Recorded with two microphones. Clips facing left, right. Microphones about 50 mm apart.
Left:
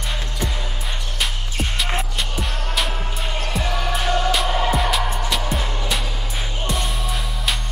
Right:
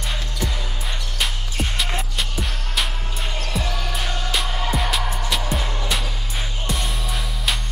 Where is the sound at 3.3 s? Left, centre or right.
Centre.